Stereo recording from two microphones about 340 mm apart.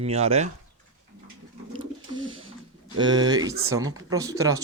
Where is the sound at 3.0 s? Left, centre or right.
Centre.